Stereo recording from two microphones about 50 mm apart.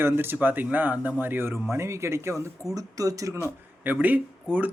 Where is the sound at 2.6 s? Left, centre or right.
Right.